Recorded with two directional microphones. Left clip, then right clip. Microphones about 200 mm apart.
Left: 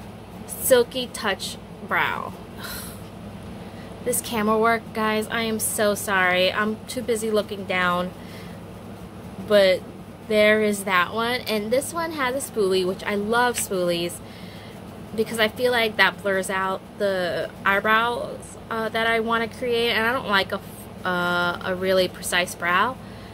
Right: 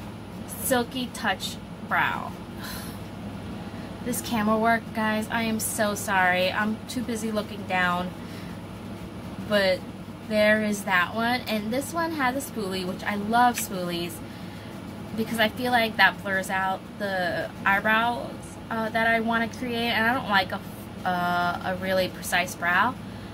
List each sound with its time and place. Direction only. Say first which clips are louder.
0.7 s a woman's voice: left 8 dB; 50° left (ahead or behind)
4.1 s a woman's voice: left 3 dB; 55° left (ahead or behind)
9.5 s a woman's voice: left 6 dB; 40° left (ahead or behind)
15.2 s a woman's voice: left 3 dB; 50° left (ahead or behind)